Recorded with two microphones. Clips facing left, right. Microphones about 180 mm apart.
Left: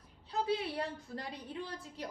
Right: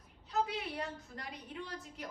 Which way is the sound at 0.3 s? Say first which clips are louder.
Left 2 dB; 30° left (ahead or behind).